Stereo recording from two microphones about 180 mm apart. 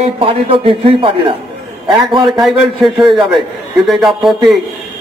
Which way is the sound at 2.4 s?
Centre (ahead or behind).